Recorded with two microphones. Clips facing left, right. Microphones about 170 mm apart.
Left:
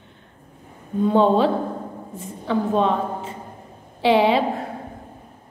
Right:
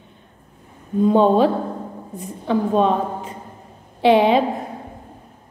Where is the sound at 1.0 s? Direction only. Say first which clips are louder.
Right 2 dB; 15° right (ahead or behind).